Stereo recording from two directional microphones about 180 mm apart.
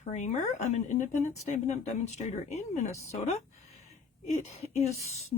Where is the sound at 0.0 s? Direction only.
40° left (ahead or behind).